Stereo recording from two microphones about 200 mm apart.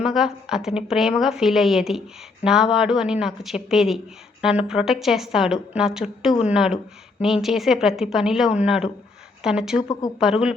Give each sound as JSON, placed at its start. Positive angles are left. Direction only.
{"t": 0.0, "sound": "a woman's voice", "side_deg": 0}